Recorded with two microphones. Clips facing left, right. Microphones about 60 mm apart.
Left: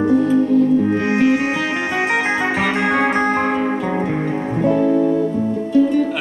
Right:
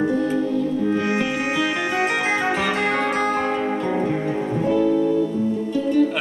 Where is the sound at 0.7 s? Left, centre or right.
Left.